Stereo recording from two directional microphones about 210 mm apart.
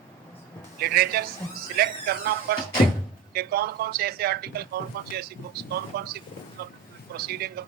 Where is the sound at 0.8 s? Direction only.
45° right (ahead or behind).